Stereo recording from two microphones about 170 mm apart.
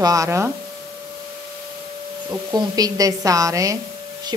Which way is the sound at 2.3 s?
20° right (ahead or behind).